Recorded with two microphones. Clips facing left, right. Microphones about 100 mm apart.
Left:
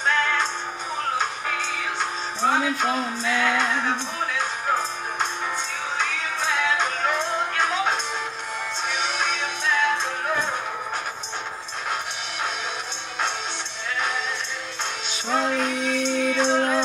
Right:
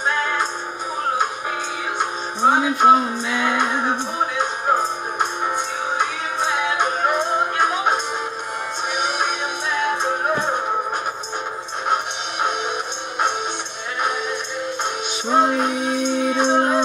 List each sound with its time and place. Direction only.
0.0 s music: 15° right (ahead or behind)
11.9 s music: 20° right (ahead or behind)
15.2 s music: 20° right (ahead or behind)